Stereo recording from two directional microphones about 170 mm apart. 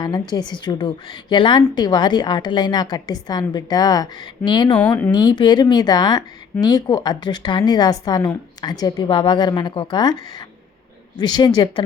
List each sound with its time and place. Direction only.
0.0 s speech: 25° left (ahead or behind)
4.8 s speech: 10° left (ahead or behind)
5.1 s speech: 25° left (ahead or behind)